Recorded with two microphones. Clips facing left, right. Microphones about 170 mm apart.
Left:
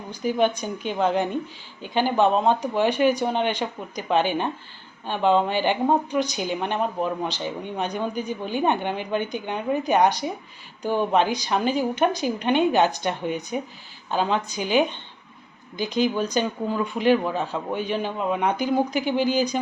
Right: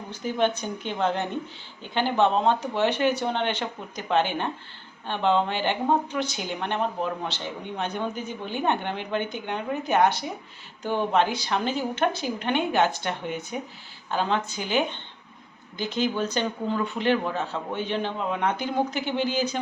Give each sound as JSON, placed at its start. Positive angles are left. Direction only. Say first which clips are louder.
{"t": 0.1, "sound": "speech", "louder": "left 3 dB", "side_deg": 10}